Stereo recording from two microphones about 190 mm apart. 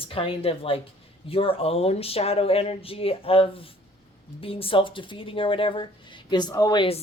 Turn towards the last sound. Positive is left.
turn(degrees=25)  # may be behind; listen again after turning